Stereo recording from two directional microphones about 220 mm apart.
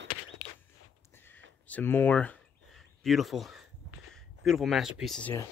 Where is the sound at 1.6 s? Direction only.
10° left (ahead or behind).